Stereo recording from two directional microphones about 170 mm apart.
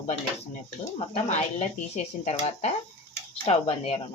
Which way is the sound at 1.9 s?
40° left (ahead or behind).